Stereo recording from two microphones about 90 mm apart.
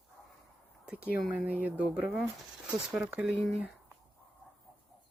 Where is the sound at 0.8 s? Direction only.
15° right (ahead or behind).